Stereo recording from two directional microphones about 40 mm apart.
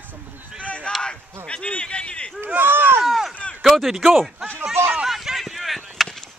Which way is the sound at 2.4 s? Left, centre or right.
Right.